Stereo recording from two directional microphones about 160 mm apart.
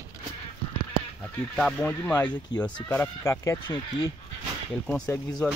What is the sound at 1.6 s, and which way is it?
Speech, 5° left (ahead or behind).